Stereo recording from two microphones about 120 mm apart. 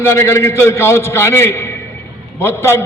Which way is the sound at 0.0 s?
20° left (ahead or behind).